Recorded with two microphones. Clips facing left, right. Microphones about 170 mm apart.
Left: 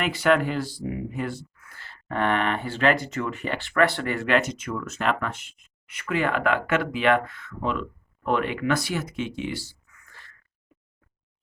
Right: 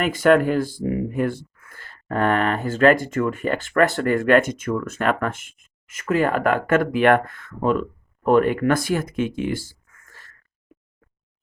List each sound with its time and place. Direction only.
0.0 s speech: 45° right (ahead or behind)